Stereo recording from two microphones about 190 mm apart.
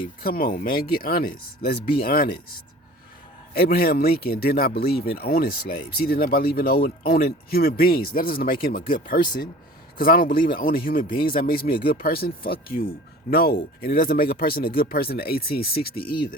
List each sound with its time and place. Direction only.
0.2 s speech: 50° left (ahead or behind)
3.5 s speech: 50° left (ahead or behind)